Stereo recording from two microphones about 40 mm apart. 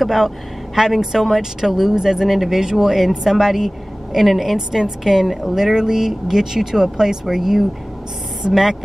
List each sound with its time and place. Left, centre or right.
0.0 s a woman's voice: centre